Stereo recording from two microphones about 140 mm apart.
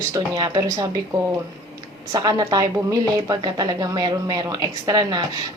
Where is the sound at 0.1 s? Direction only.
25° right (ahead or behind).